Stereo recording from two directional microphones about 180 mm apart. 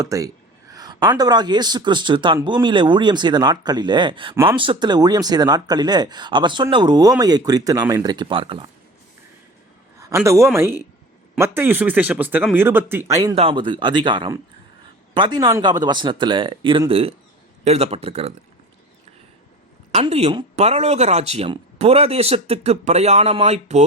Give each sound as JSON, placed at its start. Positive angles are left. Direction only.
{"t": 0.0, "sound": "speech", "side_deg": -15}
{"t": 10.0, "sound": "speech", "side_deg": -15}
{"t": 13.3, "sound": "speech", "side_deg": -30}
{"t": 19.9, "sound": "speech", "side_deg": -35}